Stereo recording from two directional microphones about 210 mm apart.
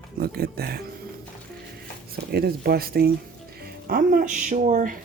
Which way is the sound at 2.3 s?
50° right (ahead or behind).